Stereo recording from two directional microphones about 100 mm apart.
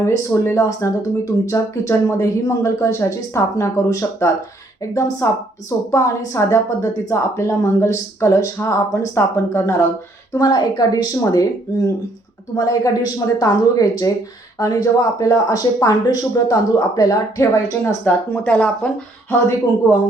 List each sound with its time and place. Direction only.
0.0 s speech: 25° left (ahead or behind)
10.3 s speech: 45° left (ahead or behind)
18.0 s speech: 15° left (ahead or behind)